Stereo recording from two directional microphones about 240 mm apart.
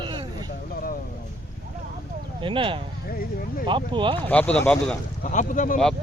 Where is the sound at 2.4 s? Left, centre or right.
Right.